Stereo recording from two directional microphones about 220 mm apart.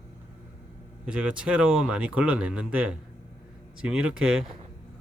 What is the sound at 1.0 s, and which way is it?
Speech, 5° right (ahead or behind).